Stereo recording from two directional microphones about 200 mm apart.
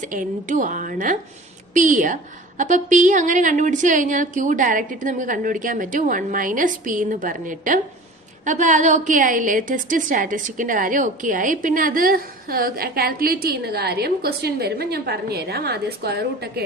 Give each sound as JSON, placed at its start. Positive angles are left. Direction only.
{"t": 0.0, "sound": "a woman's voice", "side_deg": -40}